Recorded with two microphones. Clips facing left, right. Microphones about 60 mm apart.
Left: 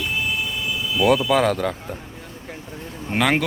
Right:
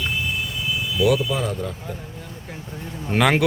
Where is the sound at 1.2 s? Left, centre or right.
Left.